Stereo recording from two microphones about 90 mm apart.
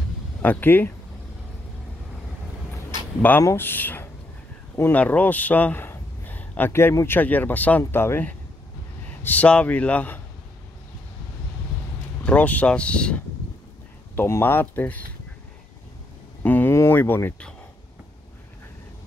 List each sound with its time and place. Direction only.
0.4 s speech: 20° left (ahead or behind)
3.2 s a man's voice: 20° left (ahead or behind)
12.2 s speech: 15° left (ahead or behind)
14.1 s speech: 25° left (ahead or behind)
16.4 s a sound: 20° left (ahead or behind)